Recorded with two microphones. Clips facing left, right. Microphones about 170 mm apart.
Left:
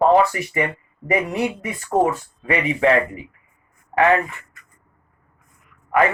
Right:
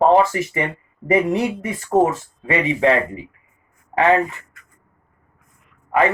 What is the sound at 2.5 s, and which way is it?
Speech, 25° right (ahead or behind).